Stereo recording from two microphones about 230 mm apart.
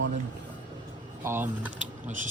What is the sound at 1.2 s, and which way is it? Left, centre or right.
Speech, centre.